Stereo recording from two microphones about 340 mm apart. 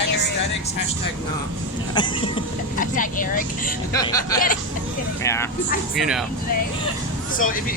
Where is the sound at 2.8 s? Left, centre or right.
Left.